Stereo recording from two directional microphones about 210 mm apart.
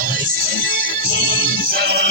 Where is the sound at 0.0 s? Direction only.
40° right (ahead or behind).